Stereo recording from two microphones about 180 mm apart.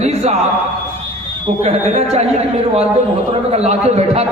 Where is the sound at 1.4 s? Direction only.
35° right (ahead or behind).